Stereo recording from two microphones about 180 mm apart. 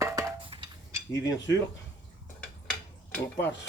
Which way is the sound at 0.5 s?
30° right (ahead or behind).